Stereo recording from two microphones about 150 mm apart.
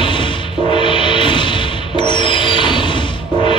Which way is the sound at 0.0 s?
35° left (ahead or behind).